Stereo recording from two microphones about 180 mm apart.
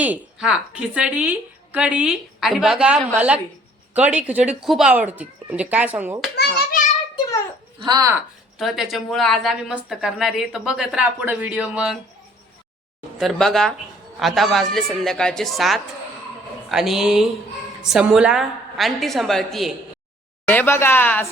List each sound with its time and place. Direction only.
0.0 s speech: 5° right (ahead or behind)
6.3 s children playing: 55° left (ahead or behind)
7.8 s speech: 20° right (ahead or behind)
8.5 s a woman's voice: centre (ahead or behind)
13.1 s a woman's voice: centre (ahead or behind)
20.5 s a woman's voice: 10° left (ahead or behind)